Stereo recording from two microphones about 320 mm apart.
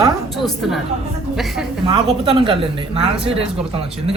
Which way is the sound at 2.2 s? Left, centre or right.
Centre.